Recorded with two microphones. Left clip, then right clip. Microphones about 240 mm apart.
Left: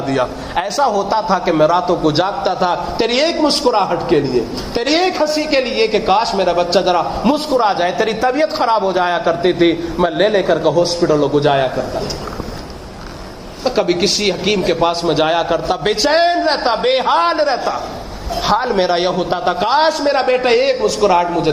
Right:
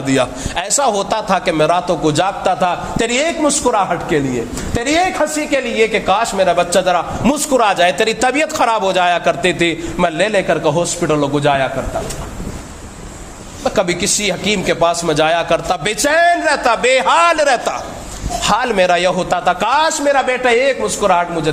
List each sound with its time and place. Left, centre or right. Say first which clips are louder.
0.1 s a man's voice: right 2 dB; right
13.7 s a man's voice: left 1 dB; right